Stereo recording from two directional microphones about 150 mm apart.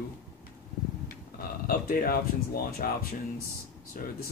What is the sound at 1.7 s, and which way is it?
Speech, 75° left (ahead or behind).